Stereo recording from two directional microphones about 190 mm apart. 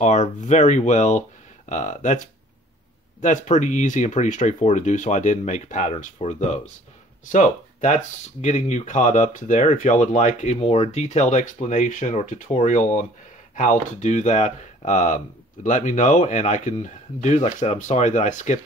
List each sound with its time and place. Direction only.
0.0 s speech: 40° left (ahead or behind)